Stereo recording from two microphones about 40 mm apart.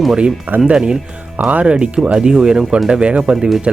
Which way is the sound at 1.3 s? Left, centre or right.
Right.